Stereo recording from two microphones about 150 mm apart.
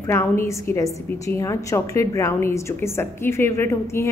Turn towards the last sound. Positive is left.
turn(degrees=20)  # may be behind; listen again after turning